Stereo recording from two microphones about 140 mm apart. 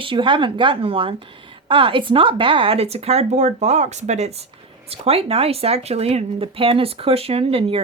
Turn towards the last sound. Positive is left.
turn(degrees=-45)  # may be behind; listen again after turning